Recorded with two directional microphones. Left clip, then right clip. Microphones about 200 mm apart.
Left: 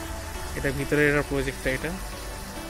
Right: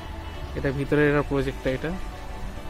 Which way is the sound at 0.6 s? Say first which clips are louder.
Right 1 dB; 20° right (ahead or behind).